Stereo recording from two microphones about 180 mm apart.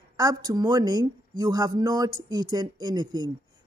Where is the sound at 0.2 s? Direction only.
20° right (ahead or behind).